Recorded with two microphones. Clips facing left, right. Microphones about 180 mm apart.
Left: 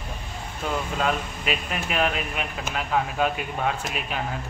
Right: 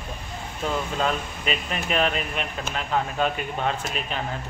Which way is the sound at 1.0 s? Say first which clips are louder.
Even; 5° left (ahead or behind).